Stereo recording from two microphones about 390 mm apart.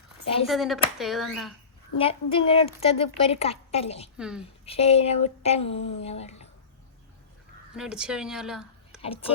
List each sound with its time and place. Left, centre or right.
0.4 s speech: centre
2.0 s a woman's voice: centre
4.2 s speech: centre
4.6 s a woman's voice: centre
7.8 s speech: centre
9.0 s speech: centre